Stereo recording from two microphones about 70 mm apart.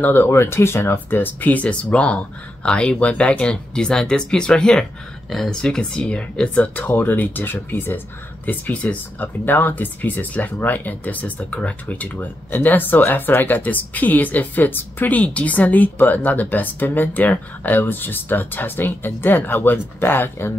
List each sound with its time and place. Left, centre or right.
0.0 s speech: left